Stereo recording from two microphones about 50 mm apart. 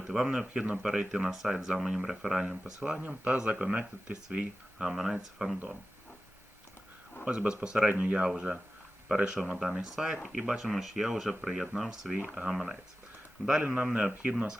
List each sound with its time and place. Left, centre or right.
0.1 s speech: centre; by 4.4 s right
4.8 s speech: centre
7.3 s speech: centre
9.6 s speech: centre
12.1 s speech: centre
13.6 s speech: right